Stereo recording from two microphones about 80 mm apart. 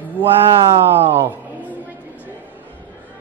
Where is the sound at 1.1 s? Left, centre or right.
Right.